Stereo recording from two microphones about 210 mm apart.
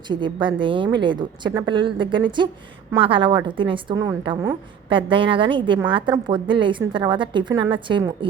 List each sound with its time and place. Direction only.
0.1 s a woman's voice: 20° right (ahead or behind)